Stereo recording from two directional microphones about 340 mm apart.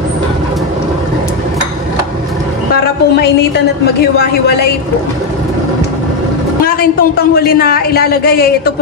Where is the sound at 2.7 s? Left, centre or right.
Left.